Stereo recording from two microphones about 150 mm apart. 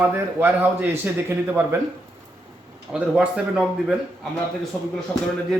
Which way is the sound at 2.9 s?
5° right (ahead or behind).